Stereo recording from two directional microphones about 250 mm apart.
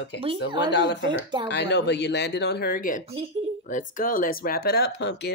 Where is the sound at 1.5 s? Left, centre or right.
Left.